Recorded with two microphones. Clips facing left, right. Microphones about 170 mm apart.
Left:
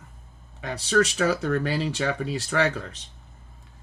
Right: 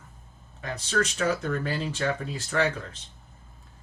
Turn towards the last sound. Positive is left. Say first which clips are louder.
# left 2 dB
turn(degrees=70)  # may be behind; listen again after turning